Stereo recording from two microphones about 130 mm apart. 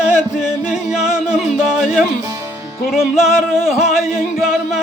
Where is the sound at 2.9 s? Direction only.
5° right (ahead or behind).